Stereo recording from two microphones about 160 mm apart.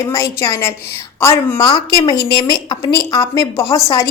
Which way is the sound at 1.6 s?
25° left (ahead or behind).